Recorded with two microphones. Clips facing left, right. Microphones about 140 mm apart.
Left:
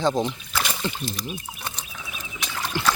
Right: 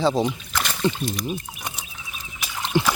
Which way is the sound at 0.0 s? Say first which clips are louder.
Right 2 dB; 10° right (ahead or behind).